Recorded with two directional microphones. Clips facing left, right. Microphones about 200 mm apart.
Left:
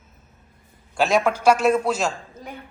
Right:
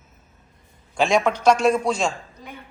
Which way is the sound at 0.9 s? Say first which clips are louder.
Even; 5° left (ahead or behind).